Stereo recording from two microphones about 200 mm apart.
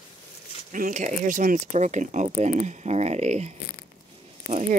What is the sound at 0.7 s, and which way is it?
Speech, 40° right (ahead or behind).